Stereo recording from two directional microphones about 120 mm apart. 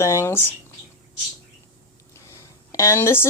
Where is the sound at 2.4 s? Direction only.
25° left (ahead or behind).